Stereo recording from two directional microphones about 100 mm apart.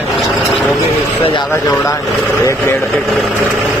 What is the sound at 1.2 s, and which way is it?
Speech, 60° left (ahead or behind).